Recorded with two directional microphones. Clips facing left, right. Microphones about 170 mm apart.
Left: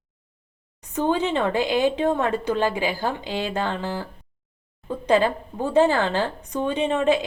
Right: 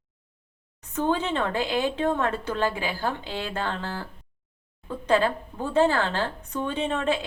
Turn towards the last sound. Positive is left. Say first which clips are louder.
# left 5 dB
turn(degrees=15)  # may be behind; listen again after turning